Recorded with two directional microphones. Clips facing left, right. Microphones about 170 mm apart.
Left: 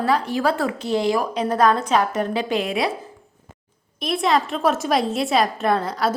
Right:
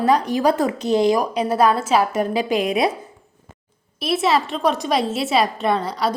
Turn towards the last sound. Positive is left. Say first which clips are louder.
# even
turn(degrees=0)  # may be behind; listen again after turning